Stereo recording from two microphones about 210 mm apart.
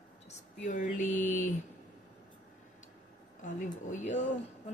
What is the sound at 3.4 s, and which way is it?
Speech, 35° left (ahead or behind).